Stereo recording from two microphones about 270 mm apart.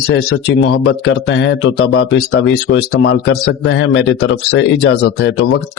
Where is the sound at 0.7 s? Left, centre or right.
Left.